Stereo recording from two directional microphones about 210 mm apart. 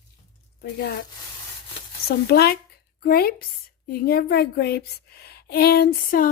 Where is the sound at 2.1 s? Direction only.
50° left (ahead or behind).